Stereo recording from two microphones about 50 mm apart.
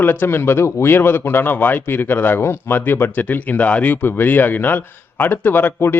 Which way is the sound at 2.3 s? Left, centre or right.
Left.